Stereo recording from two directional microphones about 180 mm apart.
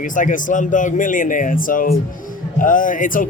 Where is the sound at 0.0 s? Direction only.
45° left (ahead or behind).